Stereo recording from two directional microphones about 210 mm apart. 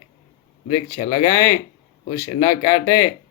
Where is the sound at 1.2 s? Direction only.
15° left (ahead or behind).